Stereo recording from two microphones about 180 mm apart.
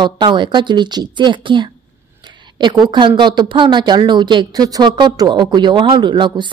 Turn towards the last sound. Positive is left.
turn(degrees=-25)  # may be behind; listen again after turning